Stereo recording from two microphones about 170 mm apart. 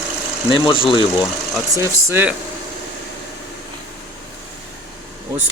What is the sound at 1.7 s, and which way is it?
Speech, 15° right (ahead or behind).